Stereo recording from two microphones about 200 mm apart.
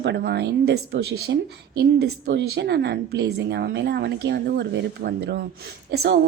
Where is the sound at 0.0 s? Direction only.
55° right (ahead or behind).